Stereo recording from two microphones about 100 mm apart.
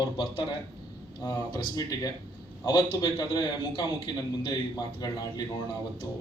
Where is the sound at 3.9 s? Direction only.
55° left (ahead or behind).